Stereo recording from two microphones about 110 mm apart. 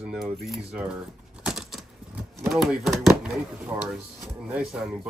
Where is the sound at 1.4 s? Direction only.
5° right (ahead or behind).